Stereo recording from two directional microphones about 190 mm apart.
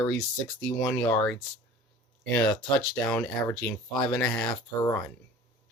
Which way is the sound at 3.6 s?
5° left (ahead or behind).